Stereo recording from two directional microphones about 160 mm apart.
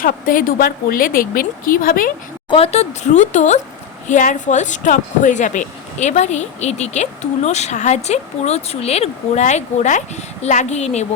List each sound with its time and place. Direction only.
0.0 s a woman's voice: 60° left (ahead or behind)
2.5 s speech: 40° left (ahead or behind)